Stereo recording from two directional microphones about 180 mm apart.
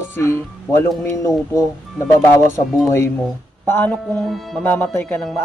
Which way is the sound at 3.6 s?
10° left (ahead or behind).